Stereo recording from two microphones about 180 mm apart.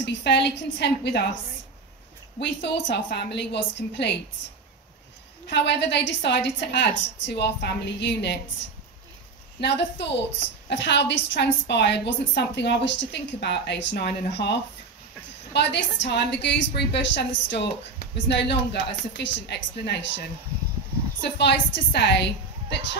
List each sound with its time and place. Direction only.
0.0 s a woman's voice: 75° left (ahead or behind)
2.4 s a woman's voice: 75° left (ahead or behind)
5.5 s a woman's voice: 75° left (ahead or behind)
9.6 s a woman's voice: 75° left (ahead or behind)